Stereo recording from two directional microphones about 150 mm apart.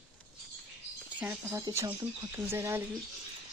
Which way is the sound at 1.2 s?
10° right (ahead or behind).